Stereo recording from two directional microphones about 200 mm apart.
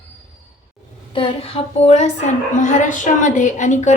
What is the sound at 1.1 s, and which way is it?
A woman's voice, 25° left (ahead or behind).